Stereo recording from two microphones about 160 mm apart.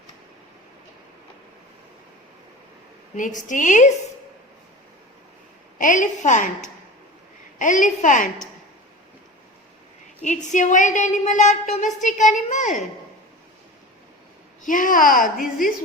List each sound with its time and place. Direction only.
3.2 s a woman's voice: 50° left (ahead or behind)
5.8 s a woman's voice: 55° left (ahead or behind)
10.2 s a woman's voice: 50° left (ahead or behind)
14.6 s a child's voice: 55° left (ahead or behind)